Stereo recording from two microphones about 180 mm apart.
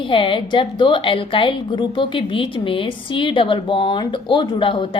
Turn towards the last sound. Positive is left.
turn(degrees=30)  # may be behind; listen again after turning